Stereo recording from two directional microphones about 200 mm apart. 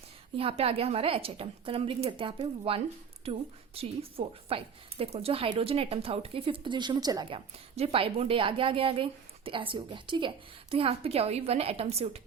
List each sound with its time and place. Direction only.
0.3 s speech: 30° right (ahead or behind)